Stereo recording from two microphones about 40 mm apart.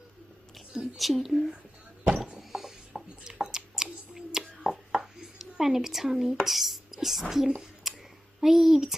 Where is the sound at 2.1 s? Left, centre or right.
Right.